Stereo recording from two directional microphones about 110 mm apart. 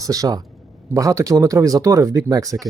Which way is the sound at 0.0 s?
35° right (ahead or behind).